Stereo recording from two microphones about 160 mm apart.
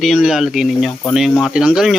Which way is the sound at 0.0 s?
Centre (ahead or behind).